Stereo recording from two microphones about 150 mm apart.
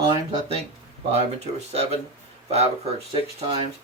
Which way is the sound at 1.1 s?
45° right (ahead or behind).